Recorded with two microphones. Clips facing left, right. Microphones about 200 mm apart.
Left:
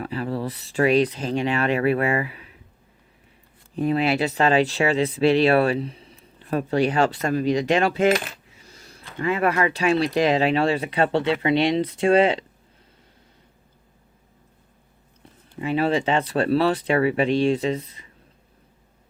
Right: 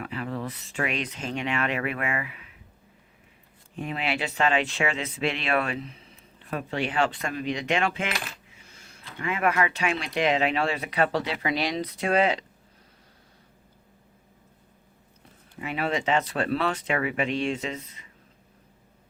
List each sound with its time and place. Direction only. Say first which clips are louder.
0.0 s speech: left 5 dB; 35° left (ahead or behind)
3.8 s speech: left 9 dB; 40° left (ahead or behind)
15.5 s speech: left 7 dB; 30° left (ahead or behind)